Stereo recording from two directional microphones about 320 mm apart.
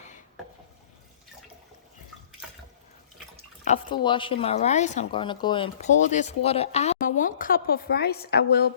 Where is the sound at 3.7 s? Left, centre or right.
Centre.